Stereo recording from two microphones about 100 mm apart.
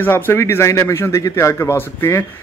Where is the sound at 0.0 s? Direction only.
25° left (ahead or behind).